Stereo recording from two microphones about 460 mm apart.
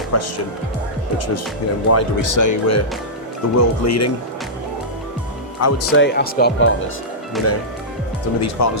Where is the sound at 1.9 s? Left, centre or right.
Left.